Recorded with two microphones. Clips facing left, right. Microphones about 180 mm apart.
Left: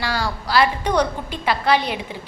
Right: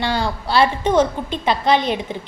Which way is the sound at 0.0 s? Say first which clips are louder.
Right 3 dB; 25° right (ahead or behind).